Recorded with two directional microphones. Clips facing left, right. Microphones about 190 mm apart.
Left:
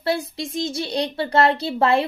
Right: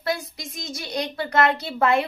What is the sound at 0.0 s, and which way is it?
A woman's voice, 30° left (ahead or behind).